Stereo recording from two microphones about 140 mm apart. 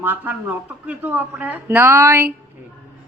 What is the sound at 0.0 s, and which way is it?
Speech, 15° right (ahead or behind).